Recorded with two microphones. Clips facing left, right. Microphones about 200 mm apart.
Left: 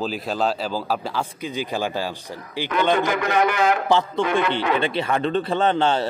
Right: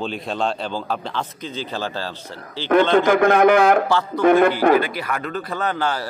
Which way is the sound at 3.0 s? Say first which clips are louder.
Right 6 dB; 50° right (ahead or behind).